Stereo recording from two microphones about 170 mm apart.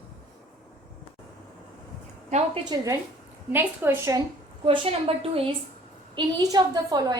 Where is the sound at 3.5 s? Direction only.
15° right (ahead or behind).